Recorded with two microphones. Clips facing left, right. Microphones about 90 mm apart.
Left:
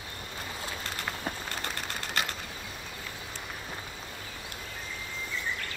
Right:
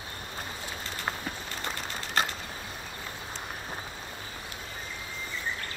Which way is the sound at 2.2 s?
40° right (ahead or behind).